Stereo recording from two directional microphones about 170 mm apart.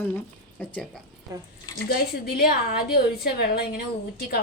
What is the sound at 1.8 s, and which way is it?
A woman's voice, 65° left (ahead or behind).